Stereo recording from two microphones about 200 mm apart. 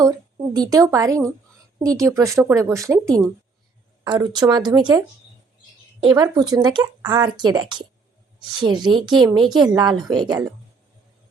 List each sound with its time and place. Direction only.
0.0 s a woman's voice: 20° right (ahead or behind)